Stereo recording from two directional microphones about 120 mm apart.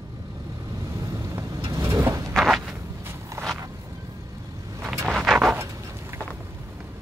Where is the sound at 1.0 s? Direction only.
25° right (ahead or behind).